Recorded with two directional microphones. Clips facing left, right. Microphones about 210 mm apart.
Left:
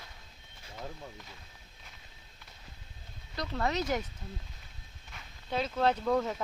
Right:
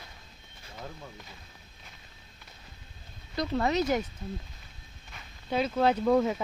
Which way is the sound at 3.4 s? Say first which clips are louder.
Right 5 dB; 15° right (ahead or behind).